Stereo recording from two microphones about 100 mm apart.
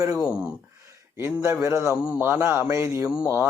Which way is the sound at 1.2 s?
25° right (ahead or behind).